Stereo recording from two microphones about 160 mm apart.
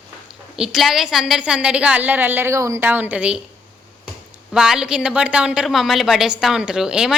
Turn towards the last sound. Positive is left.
turn(degrees=-5)  # may be behind; listen again after turning